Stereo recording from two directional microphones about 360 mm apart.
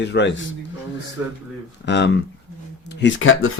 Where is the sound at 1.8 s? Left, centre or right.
Left.